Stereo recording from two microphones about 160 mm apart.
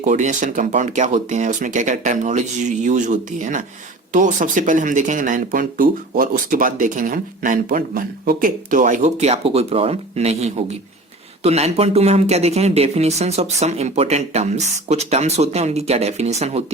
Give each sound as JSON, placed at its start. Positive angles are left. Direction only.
{"t": 0.0, "sound": "speech", "side_deg": -50}